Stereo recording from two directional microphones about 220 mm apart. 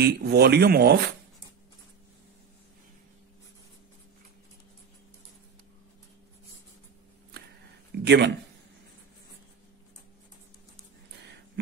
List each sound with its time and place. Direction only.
0.0 s speech: 45° right (ahead or behind)
7.9 s speech: 50° right (ahead or behind)